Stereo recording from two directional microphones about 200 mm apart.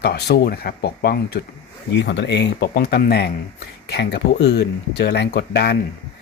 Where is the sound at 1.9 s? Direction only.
60° left (ahead or behind).